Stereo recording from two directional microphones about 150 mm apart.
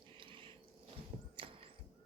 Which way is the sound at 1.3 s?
35° right (ahead or behind).